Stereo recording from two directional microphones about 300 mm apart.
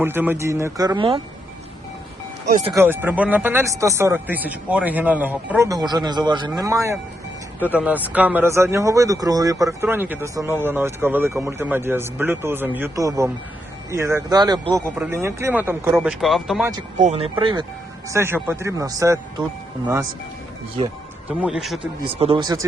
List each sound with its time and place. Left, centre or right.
0.0 s speech: centre
2.6 s speech: centre
17.0 s speech: right
20.7 s speech: centre
22.0 s speech: centre